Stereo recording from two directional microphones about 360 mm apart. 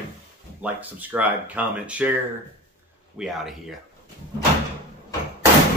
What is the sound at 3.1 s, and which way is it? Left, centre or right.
Speech, centre.